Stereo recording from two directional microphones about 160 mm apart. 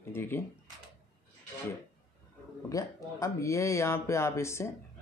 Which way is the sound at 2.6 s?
20° left (ahead or behind).